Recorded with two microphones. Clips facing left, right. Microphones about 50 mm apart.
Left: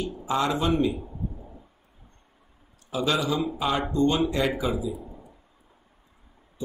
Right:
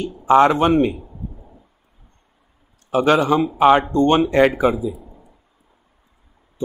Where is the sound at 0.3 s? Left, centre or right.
Right.